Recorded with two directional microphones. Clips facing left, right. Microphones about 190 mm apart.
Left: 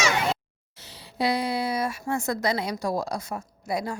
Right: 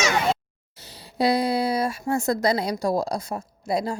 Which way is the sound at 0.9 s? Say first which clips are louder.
Right 4 dB; 35° right (ahead or behind).